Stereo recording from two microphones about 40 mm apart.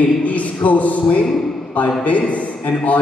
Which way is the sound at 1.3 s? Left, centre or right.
Centre.